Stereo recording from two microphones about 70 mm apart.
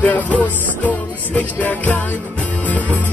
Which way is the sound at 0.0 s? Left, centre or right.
Left.